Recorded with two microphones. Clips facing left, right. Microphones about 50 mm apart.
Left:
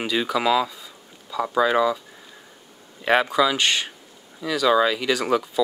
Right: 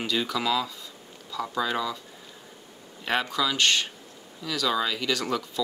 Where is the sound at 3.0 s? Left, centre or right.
Centre.